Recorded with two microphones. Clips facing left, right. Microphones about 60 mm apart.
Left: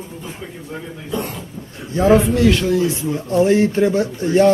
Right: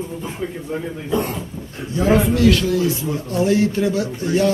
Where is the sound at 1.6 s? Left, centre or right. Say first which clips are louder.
Right 1 dB; right.